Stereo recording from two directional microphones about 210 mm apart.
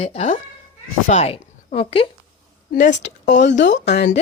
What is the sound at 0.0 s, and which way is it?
A woman's voice, 30° left (ahead or behind).